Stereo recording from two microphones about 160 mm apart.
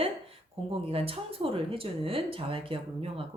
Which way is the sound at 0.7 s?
35° right (ahead or behind).